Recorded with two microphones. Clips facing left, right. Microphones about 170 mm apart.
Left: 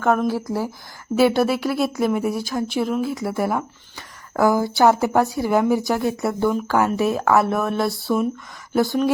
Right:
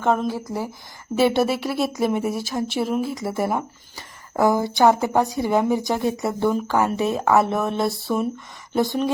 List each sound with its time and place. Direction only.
0.0 s speech: 20° right (ahead or behind)
1.1 s a woman's voice: centre (ahead or behind)
4.9 s speech: 15° right (ahead or behind)
5.3 s a woman's voice: centre (ahead or behind)